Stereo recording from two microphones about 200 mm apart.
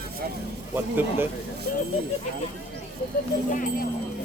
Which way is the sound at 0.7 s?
10° right (ahead or behind).